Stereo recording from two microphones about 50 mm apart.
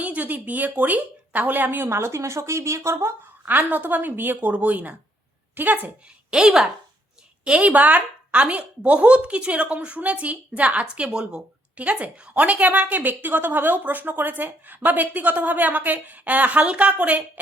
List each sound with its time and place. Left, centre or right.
0.0 s a woman's voice: right
1.9 s speech: right
3.4 s a woman's voice: right
6.3 s a woman's voice: centre
7.7 s a woman's voice: right; by 11.4 s centre
11.8 s a woman's voice: right